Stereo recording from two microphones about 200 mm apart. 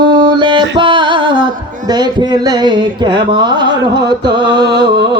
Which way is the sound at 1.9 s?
20° right (ahead or behind).